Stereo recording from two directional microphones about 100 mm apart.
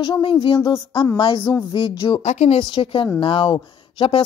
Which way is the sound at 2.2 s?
90° left.